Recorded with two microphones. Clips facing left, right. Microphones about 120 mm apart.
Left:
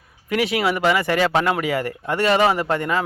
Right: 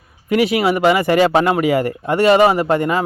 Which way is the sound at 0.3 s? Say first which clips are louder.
Right 5 dB; 5° right (ahead or behind).